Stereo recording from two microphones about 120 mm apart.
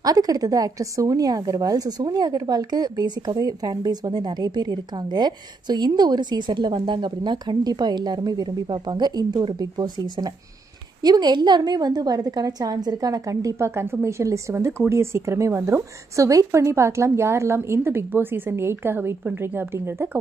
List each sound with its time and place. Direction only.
0.0 s a woman's voice: 30° right (ahead or behind)